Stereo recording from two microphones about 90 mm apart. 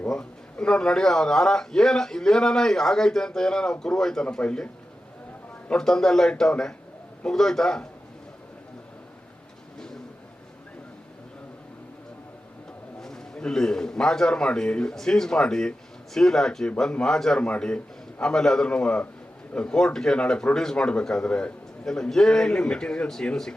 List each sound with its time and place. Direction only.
0.0 s a man's voice: 10° left (ahead or behind)
13.0 s a man's voice: 5° left (ahead or behind)